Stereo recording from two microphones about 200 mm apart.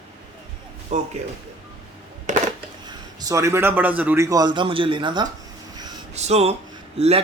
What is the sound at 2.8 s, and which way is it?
A man's voice, 20° right (ahead or behind).